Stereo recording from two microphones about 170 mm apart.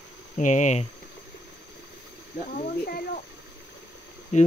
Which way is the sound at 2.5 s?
60° left (ahead or behind).